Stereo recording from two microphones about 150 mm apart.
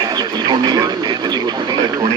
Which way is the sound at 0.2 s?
25° right (ahead or behind).